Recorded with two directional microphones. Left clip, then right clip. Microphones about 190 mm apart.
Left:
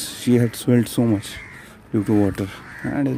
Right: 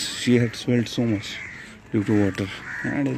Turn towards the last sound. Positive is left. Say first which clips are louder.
# left 1 dB
turn(degrees=10)  # may be behind; listen again after turning